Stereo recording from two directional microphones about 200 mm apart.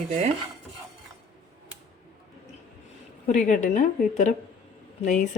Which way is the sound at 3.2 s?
40° left (ahead or behind).